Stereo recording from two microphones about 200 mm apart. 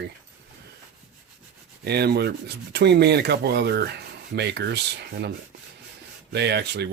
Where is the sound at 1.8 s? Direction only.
55° right (ahead or behind).